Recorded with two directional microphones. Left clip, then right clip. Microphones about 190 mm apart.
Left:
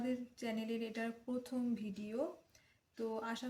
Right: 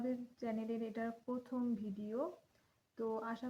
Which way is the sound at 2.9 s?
30° left (ahead or behind).